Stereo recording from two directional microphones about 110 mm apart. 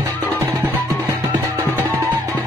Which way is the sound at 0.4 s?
25° right (ahead or behind).